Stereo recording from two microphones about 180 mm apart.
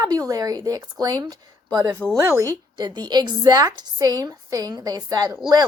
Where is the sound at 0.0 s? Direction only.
20° right (ahead or behind).